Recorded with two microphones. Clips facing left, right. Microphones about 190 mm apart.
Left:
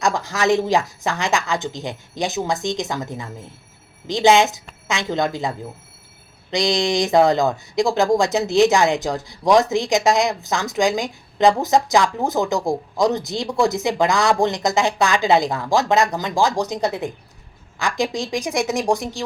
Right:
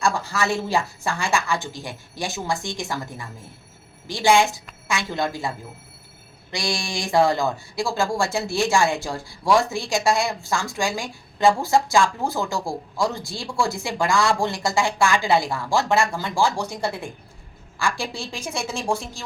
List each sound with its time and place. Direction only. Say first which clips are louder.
0.0 s a woman's voice: left 3 dB; 15° left (ahead or behind)